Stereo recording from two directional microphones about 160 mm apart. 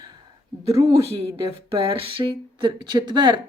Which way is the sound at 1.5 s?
35° right (ahead or behind).